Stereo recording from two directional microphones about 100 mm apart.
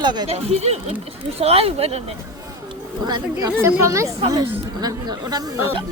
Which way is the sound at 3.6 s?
30° right (ahead or behind).